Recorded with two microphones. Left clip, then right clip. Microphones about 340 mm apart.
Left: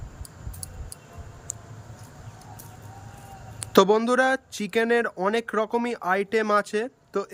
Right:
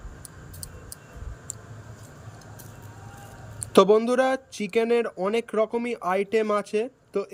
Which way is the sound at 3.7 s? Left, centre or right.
Centre.